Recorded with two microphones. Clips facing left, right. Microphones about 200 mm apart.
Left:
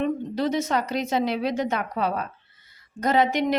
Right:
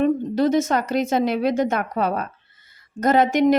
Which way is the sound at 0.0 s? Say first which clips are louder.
Right 6 dB; 45° right (ahead or behind).